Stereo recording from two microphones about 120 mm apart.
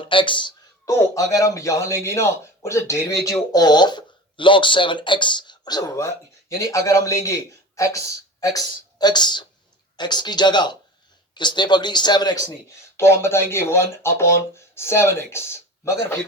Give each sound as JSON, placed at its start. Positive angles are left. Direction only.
{"t": 0.0, "sound": "speech", "side_deg": 45}
{"t": 0.9, "sound": "speech", "side_deg": 25}
{"t": 13.0, "sound": "speech", "side_deg": 20}